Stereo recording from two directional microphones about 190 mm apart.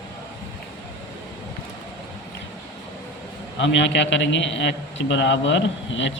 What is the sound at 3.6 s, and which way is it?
A man's voice, 75° left (ahead or behind).